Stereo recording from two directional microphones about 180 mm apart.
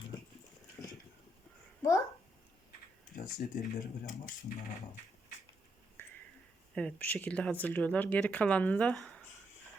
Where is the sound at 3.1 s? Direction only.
45° left (ahead or behind).